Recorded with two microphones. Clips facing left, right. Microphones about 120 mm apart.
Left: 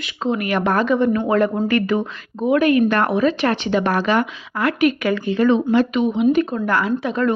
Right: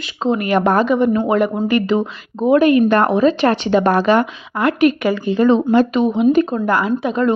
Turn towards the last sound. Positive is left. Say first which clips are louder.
# right 3 dB
turn(degrees=-20)  # may be behind; listen again after turning